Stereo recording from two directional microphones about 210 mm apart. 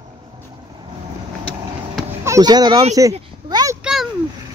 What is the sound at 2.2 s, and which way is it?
Speech, 15° right (ahead or behind).